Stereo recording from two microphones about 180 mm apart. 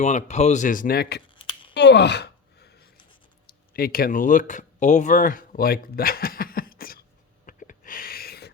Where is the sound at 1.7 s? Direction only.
70° left (ahead or behind).